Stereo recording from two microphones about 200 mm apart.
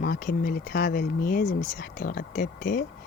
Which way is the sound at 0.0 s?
50° left (ahead or behind).